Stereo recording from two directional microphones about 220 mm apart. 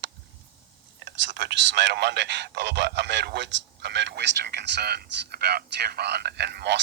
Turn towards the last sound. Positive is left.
turn(degrees=-50)  # may be behind; listen again after turning